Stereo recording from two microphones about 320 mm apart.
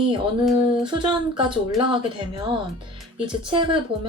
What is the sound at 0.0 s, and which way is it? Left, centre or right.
Speech, centre.